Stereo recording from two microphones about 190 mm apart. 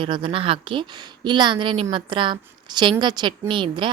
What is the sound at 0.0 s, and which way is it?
A woman's voice, 25° right (ahead or behind).